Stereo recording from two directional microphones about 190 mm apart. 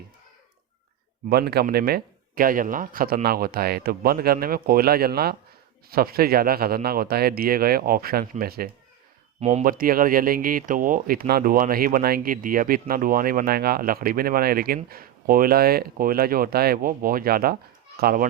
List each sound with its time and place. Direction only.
1.3 s speech: 55° right (ahead or behind)
9.4 s speech: 35° right (ahead or behind)